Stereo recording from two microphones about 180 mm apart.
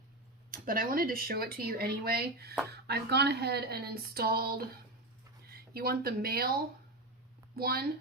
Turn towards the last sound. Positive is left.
turn(degrees=-60)  # may be behind; listen again after turning